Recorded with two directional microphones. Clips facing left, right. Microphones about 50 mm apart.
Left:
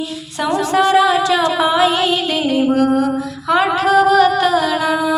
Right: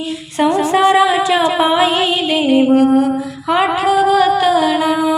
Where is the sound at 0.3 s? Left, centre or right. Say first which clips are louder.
Right 3 dB; right.